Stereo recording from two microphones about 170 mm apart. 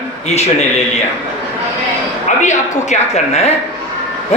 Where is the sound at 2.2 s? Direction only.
45° left (ahead or behind).